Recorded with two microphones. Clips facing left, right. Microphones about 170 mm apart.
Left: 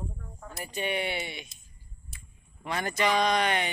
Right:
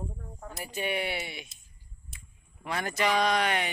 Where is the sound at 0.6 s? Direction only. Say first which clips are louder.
Left 1 dB; 5° right (ahead or behind).